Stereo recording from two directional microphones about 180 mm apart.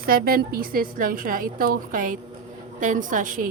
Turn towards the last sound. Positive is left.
turn(degrees=-50)  # may be behind; listen again after turning